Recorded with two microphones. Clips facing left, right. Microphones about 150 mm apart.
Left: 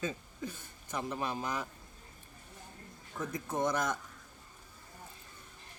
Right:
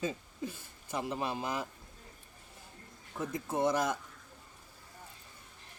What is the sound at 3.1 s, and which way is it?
Speech, 25° right (ahead or behind).